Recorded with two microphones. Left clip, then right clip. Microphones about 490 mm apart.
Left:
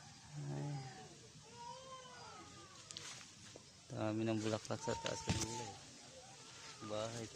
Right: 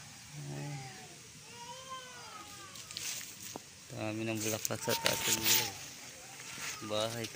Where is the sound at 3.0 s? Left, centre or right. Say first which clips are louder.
Right 10 dB; left.